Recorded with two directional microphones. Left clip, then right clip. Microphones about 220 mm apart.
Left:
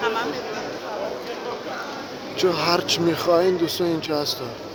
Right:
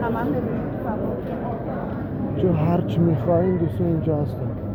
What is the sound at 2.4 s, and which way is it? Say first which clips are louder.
Speech: left 3 dB; 35° left (ahead or behind).